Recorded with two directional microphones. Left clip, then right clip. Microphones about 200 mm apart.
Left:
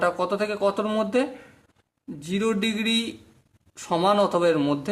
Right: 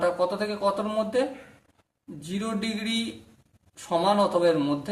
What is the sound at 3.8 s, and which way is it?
Speech, 40° left (ahead or behind).